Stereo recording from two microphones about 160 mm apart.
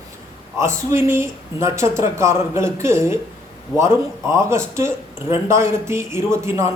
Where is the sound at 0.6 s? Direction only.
15° right (ahead or behind).